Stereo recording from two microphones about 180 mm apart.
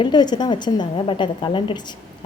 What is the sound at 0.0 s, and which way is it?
A woman's voice, 25° left (ahead or behind).